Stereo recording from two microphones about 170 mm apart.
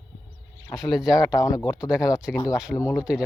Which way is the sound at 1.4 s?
20° left (ahead or behind).